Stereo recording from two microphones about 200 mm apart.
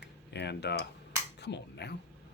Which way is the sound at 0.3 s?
55° left (ahead or behind).